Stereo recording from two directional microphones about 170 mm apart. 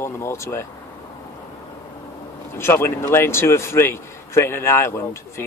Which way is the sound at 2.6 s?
15° left (ahead or behind).